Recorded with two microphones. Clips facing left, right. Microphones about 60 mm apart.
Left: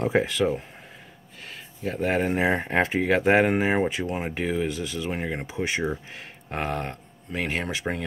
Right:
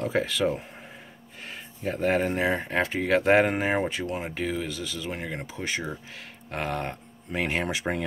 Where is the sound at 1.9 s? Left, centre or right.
Centre.